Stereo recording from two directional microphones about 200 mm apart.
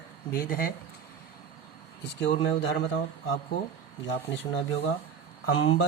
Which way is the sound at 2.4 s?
70° left (ahead or behind).